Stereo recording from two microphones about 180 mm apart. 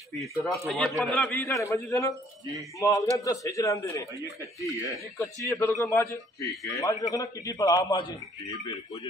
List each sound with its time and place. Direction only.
0.7 s a man's voice: centre (ahead or behind)
1.3 s a man's voice: 15° left (ahead or behind)